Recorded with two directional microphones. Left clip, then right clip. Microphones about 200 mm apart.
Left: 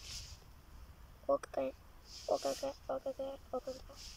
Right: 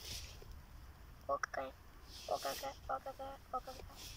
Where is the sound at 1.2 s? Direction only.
20° left (ahead or behind).